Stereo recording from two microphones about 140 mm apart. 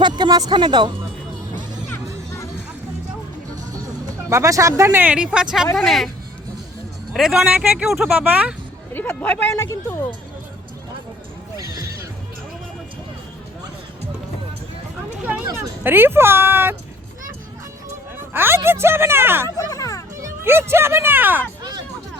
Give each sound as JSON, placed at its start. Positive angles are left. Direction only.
{"t": 0.0, "sound": "speech", "side_deg": -30}
{"t": 4.3, "sound": "speech", "side_deg": -20}
{"t": 7.1, "sound": "speech", "side_deg": 0}
{"t": 8.9, "sound": "speech", "side_deg": 10}
{"t": 11.5, "sound": "neigh", "side_deg": -25}
{"t": 15.8, "sound": "speech", "side_deg": -15}
{"t": 18.3, "sound": "speech", "side_deg": -15}
{"t": 19.5, "sound": "speech", "side_deg": 20}
{"t": 20.4, "sound": "speech", "side_deg": -15}
{"t": 21.6, "sound": "hubbub", "side_deg": -30}